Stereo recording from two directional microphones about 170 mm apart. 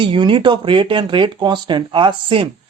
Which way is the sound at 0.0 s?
30° right (ahead or behind).